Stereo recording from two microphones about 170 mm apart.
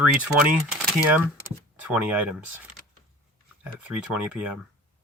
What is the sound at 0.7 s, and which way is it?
Speech, 10° right (ahead or behind).